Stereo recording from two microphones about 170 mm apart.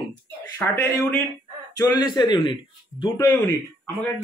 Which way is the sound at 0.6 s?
15° left (ahead or behind).